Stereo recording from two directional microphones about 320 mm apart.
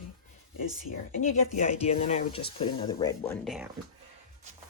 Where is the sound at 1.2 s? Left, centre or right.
Left; by 3.7 s centre.